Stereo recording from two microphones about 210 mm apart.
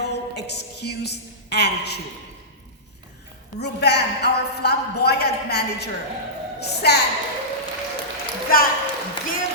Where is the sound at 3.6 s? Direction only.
55° left (ahead or behind).